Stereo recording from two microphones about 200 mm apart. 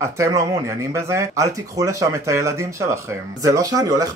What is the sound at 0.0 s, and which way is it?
Speech, 15° right (ahead or behind).